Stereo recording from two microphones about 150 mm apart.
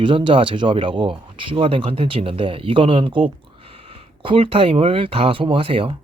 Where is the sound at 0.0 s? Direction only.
35° right (ahead or behind).